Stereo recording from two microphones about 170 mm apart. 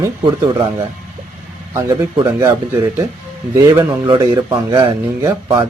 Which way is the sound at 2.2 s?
25° right (ahead or behind).